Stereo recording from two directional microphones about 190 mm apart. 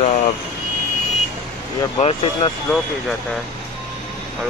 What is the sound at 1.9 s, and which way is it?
Speech, 35° left (ahead or behind).